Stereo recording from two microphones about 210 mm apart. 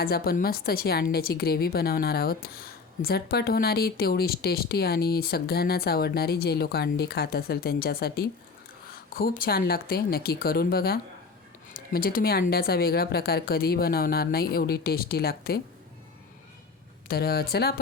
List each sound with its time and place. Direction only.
0.0 s a woman's voice: 45° left (ahead or behind)
17.1 s a woman's voice: 45° left (ahead or behind)